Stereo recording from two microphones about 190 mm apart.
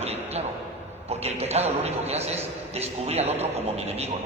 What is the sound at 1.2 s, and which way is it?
A man's voice, 35° right (ahead or behind).